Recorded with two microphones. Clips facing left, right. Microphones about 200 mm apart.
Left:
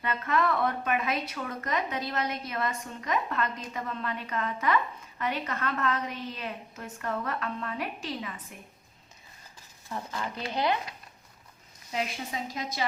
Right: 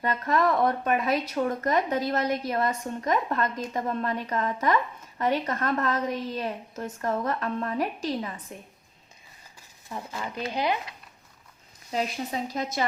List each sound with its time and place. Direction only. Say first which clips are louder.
0.0 s speech: right 4 dB; 40° right (ahead or behind)
9.9 s speech: right 1 dB; 10° right (ahead or behind)
11.9 s speech: right 4 dB; 40° right (ahead or behind)